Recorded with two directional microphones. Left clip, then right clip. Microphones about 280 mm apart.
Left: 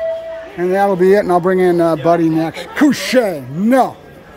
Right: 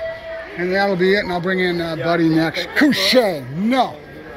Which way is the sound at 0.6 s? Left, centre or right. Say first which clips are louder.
Left 5 dB; centre.